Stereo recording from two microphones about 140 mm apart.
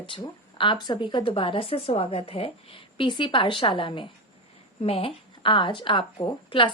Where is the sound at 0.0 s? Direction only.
35° left (ahead or behind).